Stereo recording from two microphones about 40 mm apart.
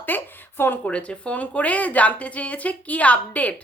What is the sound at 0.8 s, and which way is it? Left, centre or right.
A woman's voice, left.